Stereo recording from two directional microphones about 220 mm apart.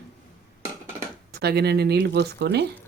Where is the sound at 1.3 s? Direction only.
45° right (ahead or behind).